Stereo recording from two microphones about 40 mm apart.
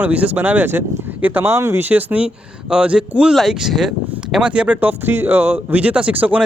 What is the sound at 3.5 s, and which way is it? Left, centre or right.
Speech, centre.